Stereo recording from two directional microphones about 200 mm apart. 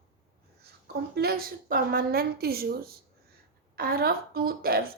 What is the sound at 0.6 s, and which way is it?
A woman's voice, 50° right (ahead or behind).